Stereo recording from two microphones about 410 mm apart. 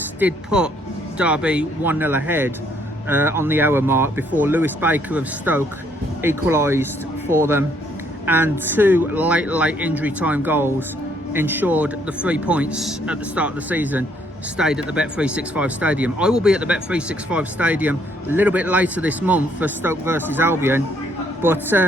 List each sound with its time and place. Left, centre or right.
0.2 s speech: centre